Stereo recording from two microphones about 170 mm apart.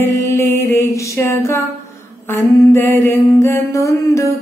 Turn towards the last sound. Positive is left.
turn(degrees=15)  # may be behind; listen again after turning